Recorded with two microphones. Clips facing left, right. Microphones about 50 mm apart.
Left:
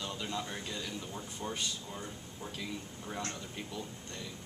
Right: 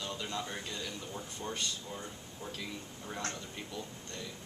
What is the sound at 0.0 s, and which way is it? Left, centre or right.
Speech, centre.